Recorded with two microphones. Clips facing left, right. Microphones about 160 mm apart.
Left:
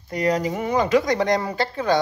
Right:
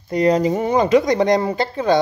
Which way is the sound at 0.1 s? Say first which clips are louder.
Right 6 dB; 25° right (ahead or behind).